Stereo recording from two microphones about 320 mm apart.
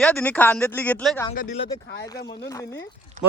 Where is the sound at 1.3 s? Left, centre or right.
Left.